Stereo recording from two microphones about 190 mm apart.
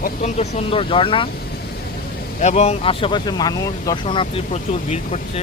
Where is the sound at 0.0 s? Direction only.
35° left (ahead or behind).